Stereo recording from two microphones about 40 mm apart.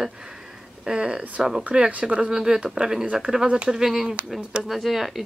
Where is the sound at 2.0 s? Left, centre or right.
Right.